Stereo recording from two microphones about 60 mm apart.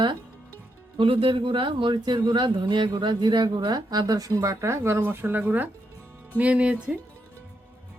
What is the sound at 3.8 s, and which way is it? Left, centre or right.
Speech, right.